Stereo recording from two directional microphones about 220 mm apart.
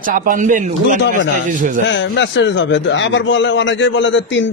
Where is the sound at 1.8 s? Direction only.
55° left (ahead or behind).